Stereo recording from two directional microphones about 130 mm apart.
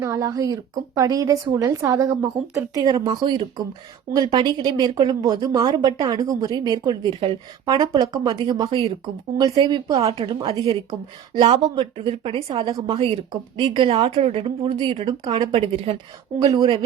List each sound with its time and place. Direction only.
0.0 s a woman's voice: 25° right (ahead or behind); by 16.0 s 45° right (ahead or behind)
16.4 s speech: 30° right (ahead or behind)